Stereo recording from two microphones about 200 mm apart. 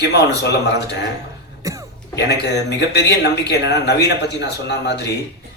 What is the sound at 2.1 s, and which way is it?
Speech, 55° left (ahead or behind).